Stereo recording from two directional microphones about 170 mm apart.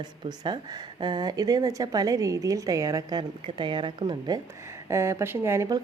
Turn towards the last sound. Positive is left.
turn(degrees=-20)  # may be behind; listen again after turning